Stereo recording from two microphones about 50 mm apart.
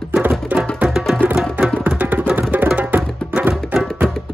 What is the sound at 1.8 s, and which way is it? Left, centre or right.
Music, right.